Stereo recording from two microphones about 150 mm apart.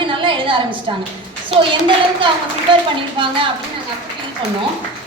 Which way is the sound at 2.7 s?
35° right (ahead or behind).